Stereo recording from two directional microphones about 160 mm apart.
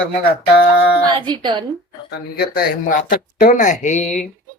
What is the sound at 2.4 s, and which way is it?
Speech, 70° left (ahead or behind).